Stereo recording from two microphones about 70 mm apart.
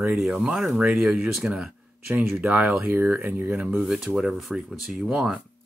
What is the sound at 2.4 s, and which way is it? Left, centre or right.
Speech, centre.